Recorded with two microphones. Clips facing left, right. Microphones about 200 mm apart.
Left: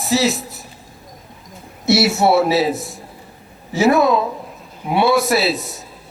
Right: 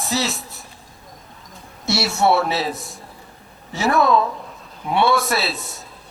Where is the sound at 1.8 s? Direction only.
Centre (ahead or behind).